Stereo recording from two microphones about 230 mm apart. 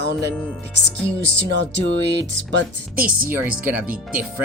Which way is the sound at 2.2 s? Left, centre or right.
Right.